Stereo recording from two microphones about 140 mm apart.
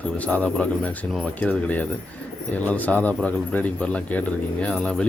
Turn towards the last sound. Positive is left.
turn(degrees=5)  # may be behind; listen again after turning